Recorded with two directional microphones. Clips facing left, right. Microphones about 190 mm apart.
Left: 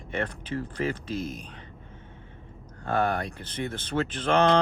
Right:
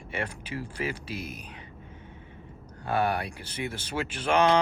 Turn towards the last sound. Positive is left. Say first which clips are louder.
# left 1 dB
turn(degrees=-10)  # may be behind; listen again after turning